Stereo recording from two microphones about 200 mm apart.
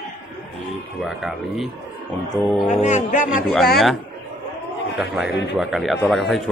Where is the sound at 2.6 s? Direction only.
35° left (ahead or behind).